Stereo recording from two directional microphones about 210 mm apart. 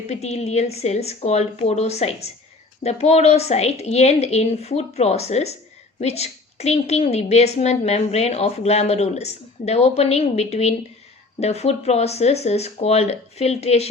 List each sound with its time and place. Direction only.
0.1 s a woman's voice: 30° left (ahead or behind)